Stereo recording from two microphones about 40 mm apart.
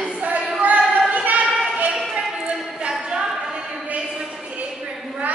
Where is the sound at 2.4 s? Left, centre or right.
Right.